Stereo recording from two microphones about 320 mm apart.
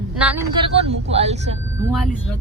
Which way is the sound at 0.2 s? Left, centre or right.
Centre.